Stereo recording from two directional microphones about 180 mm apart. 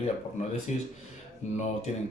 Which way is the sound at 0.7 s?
40° left (ahead or behind).